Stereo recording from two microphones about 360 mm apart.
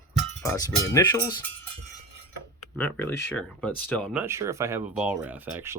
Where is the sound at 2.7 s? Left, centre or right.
Centre.